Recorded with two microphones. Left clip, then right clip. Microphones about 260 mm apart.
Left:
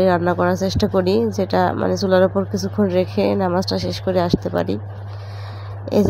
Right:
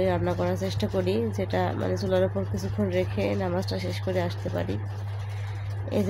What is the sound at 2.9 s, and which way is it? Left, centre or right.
A woman's voice, left.